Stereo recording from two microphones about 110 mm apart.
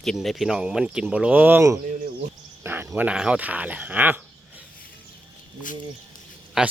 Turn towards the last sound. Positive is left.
turn(degrees=-5)  # may be behind; listen again after turning